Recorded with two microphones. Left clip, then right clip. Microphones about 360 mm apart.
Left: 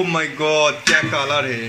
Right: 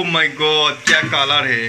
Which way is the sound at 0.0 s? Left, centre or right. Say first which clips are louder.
Right 3 dB; centre.